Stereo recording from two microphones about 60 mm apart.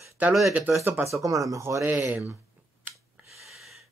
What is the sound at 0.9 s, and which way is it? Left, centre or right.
Speech, right.